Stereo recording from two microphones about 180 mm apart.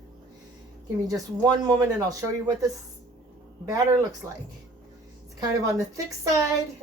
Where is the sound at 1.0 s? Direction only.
20° right (ahead or behind).